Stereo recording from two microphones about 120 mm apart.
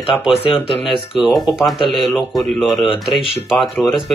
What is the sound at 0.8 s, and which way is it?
Speech, centre (ahead or behind).